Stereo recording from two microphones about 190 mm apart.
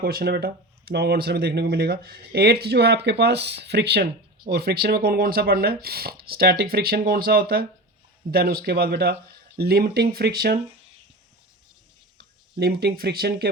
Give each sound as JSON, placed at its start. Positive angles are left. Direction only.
{"t": 0.0, "sound": "speech", "side_deg": -55}
{"t": 12.1, "sound": "speech", "side_deg": -55}